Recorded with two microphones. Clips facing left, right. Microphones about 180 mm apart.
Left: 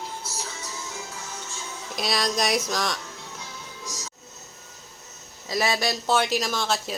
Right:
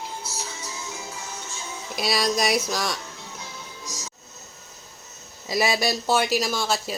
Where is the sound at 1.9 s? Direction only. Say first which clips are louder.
Right 2 dB; 5° right (ahead or behind).